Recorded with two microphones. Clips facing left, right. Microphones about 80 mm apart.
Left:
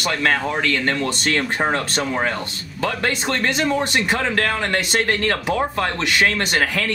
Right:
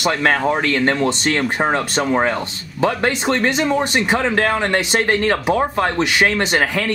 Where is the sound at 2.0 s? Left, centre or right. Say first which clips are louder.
Right 4 dB; right.